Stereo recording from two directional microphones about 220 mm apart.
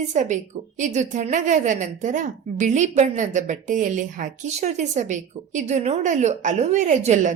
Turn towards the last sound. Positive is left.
turn(degrees=-30)  # may be behind; listen again after turning